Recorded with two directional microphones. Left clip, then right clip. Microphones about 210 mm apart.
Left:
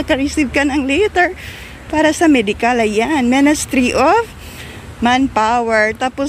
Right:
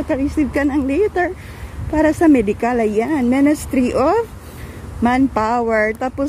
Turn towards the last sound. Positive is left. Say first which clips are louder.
# left 3 dB
turn(degrees=-10)  # may be behind; listen again after turning